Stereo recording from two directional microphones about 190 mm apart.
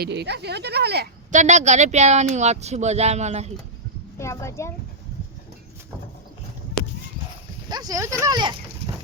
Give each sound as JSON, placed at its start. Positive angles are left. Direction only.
{"t": 0.0, "sound": "speech", "side_deg": -60}
{"t": 1.3, "sound": "speech", "side_deg": -40}
{"t": 4.2, "sound": "a woman's voice", "side_deg": 15}
{"t": 7.7, "sound": "speech", "side_deg": -20}